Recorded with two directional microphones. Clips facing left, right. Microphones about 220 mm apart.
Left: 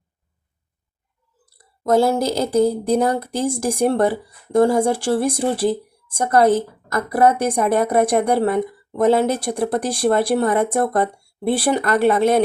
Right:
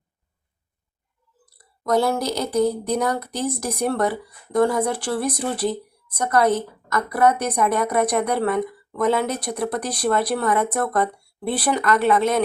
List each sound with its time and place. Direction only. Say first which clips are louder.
1.5 s speech: left 4 dB; 25° left (ahead or behind)
11.7 s speech: left 1 dB; 40° left (ahead or behind)